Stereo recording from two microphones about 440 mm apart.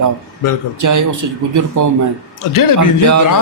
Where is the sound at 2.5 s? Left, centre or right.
Left.